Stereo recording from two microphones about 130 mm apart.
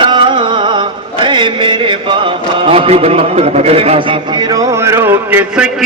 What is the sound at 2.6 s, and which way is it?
A man's voice, 45° right (ahead or behind).